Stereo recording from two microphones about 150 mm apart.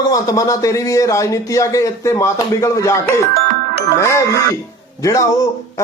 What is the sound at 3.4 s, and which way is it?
Music, 85° right.